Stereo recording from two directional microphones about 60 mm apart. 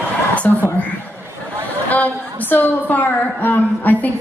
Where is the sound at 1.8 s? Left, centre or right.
Left.